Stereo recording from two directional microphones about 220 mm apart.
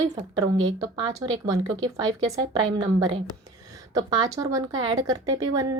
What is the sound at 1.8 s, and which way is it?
A woman's voice, 15° right (ahead or behind).